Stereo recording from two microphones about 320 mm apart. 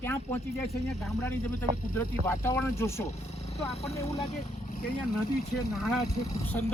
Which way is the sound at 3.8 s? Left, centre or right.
Centre.